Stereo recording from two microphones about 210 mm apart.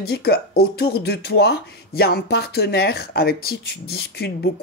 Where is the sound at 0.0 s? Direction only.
50° left (ahead or behind).